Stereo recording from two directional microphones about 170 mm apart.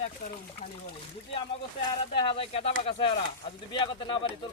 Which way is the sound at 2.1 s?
30° left (ahead or behind).